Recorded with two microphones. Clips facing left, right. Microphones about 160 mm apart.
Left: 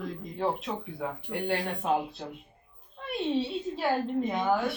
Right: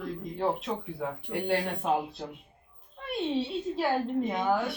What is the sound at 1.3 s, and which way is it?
Speech, centre (ahead or behind).